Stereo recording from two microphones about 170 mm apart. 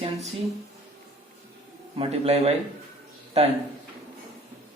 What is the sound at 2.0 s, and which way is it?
Speech, 40° right (ahead or behind).